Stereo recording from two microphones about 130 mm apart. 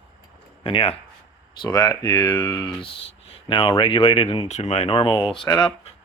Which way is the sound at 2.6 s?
45° left (ahead or behind).